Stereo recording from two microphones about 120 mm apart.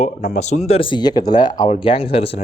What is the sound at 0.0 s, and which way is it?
Speech, 85° left.